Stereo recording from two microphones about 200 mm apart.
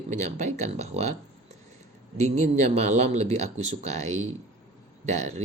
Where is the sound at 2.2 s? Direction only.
35° right (ahead or behind).